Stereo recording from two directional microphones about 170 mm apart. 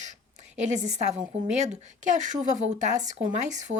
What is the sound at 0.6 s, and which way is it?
Speech, 45° right (ahead or behind).